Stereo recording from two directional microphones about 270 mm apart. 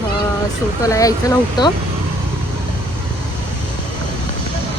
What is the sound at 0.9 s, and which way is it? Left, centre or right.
Speech, centre.